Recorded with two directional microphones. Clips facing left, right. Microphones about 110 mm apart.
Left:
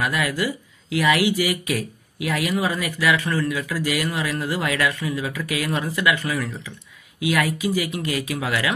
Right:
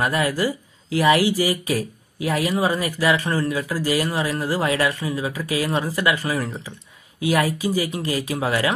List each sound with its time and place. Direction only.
0.0 s speech: 35° right (ahead or behind)